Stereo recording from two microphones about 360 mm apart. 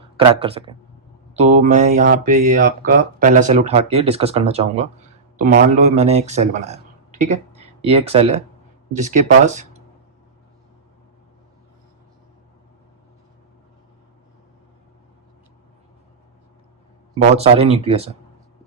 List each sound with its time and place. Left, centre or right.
0.2 s speech: centre
17.3 s speech: centre